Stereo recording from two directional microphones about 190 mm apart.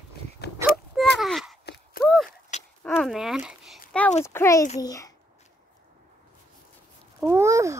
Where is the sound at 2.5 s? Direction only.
40° left (ahead or behind).